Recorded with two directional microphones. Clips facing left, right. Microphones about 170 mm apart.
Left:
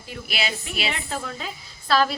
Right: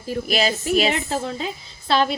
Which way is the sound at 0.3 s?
40° right (ahead or behind).